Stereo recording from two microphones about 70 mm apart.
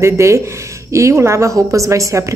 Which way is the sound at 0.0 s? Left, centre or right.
Right.